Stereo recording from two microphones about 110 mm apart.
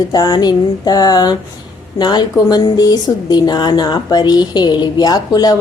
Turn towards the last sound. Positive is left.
turn(degrees=35)  # may be behind; listen again after turning